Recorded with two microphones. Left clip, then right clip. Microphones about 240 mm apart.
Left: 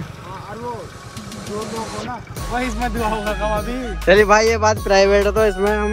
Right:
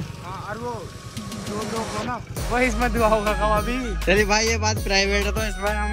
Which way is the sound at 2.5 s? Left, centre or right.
Centre.